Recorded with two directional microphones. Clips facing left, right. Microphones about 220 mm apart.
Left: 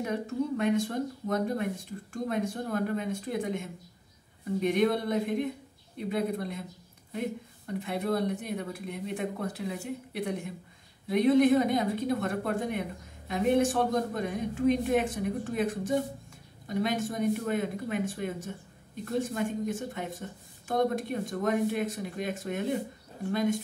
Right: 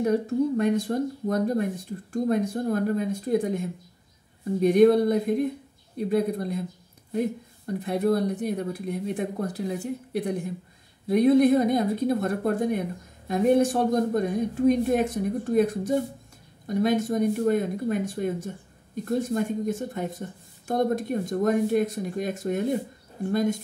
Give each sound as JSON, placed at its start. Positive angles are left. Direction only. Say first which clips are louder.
{"t": 0.0, "sound": "a woman's voice", "louder": "right 8 dB", "side_deg": -40}